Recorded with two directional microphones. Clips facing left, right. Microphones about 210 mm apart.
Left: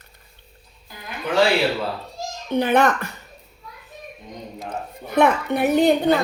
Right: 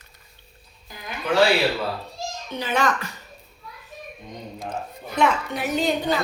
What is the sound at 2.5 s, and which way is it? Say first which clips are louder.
Speech: left 6 dB; 55° left (ahead or behind).